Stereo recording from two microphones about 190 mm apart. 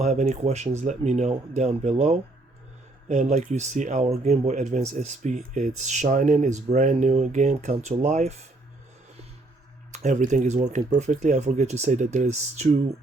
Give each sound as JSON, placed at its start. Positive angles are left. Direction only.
{"t": 0.0, "sound": "speech", "side_deg": -35}
{"t": 9.9, "sound": "speech", "side_deg": -40}